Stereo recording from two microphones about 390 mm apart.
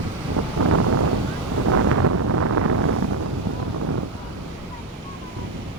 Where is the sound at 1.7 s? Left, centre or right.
Right.